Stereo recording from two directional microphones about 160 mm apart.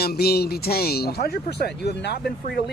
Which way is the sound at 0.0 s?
80° left.